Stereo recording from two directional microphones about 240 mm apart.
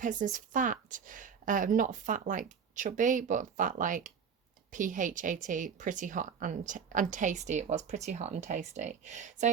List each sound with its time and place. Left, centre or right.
0.0 s speech: right